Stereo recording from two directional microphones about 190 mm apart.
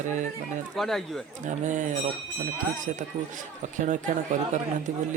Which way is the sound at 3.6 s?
40° right (ahead or behind).